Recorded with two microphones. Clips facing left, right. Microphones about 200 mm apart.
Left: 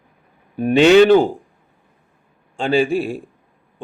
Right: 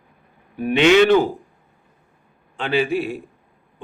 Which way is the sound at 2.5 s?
30° left (ahead or behind).